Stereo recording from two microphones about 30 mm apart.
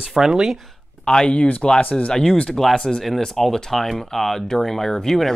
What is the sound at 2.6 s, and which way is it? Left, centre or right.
Speech, centre.